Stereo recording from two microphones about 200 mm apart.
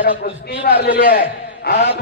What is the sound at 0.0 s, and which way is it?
A man's voice, 50° left (ahead or behind).